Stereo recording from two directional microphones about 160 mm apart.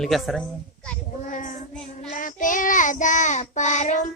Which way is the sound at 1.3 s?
55° left (ahead or behind).